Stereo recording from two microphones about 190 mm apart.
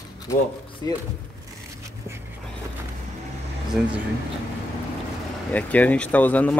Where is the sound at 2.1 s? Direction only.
15° right (ahead or behind).